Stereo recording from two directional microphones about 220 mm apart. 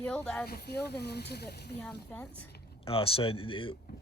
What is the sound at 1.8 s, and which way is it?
Speech, 5° left (ahead or behind).